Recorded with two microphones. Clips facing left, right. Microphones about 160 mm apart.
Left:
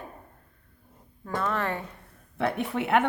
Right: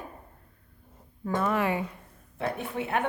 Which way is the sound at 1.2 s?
10° right (ahead or behind).